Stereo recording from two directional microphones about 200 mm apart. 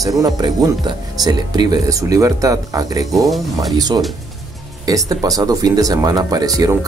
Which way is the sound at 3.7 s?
20° right (ahead or behind).